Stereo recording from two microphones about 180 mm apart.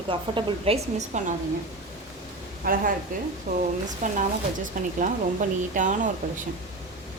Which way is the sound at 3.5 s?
45° right (ahead or behind).